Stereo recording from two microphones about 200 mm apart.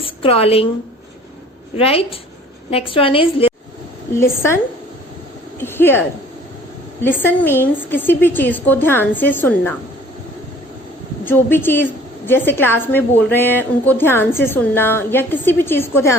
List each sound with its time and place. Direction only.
0.0 s a woman's voice: 25° left (ahead or behind)
1.7 s a woman's voice: 30° left (ahead or behind)
4.2 s a woman's voice: 10° left (ahead or behind)
11.3 s a woman's voice: 10° left (ahead or behind)